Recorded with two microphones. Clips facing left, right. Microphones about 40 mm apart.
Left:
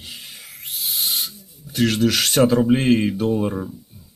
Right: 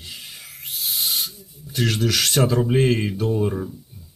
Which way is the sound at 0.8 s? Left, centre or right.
Centre.